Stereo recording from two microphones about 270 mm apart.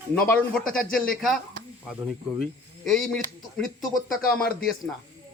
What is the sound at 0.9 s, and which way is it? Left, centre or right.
Speech, centre.